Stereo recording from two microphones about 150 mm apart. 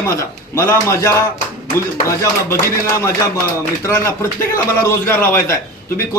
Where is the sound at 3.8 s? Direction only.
20° left (ahead or behind).